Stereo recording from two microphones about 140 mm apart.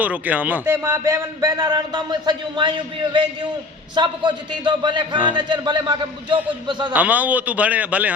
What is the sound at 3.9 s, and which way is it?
A man's voice, 35° right (ahead or behind).